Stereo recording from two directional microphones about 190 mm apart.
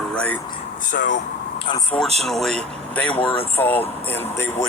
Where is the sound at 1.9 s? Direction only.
5° left (ahead or behind).